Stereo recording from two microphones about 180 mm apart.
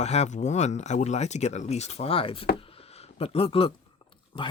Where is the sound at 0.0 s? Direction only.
40° left (ahead or behind).